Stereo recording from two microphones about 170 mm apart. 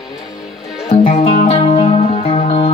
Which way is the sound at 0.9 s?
35° left (ahead or behind).